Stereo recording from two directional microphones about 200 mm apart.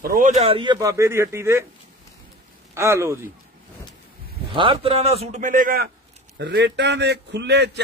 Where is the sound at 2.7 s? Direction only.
15° right (ahead or behind).